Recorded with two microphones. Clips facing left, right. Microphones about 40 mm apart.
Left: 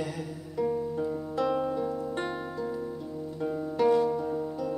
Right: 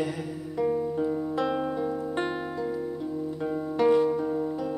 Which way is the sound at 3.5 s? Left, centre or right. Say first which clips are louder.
Right 2 dB; centre.